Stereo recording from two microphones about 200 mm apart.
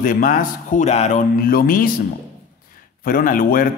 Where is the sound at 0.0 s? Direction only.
45° left (ahead or behind).